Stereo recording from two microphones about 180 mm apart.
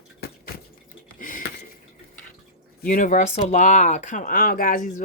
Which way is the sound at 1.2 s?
50° left (ahead or behind).